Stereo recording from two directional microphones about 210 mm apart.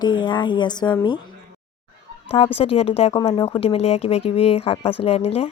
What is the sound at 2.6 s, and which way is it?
Speech, 25° left (ahead or behind).